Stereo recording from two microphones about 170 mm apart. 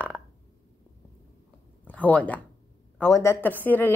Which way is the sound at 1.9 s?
10° left (ahead or behind).